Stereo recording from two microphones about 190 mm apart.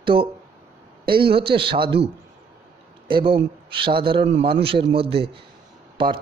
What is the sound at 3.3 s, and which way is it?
A man's voice, 25° right (ahead or behind).